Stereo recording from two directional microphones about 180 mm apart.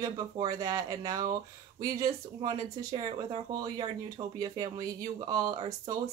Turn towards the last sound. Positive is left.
turn(degrees=-25)  # may be behind; listen again after turning